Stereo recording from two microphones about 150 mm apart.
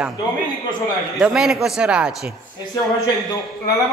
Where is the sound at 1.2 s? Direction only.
5° right (ahead or behind).